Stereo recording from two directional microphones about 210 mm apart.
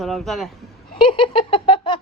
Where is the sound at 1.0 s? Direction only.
25° left (ahead or behind).